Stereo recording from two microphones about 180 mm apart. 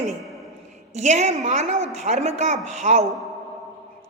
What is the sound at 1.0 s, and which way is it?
A woman's voice, 40° right (ahead or behind).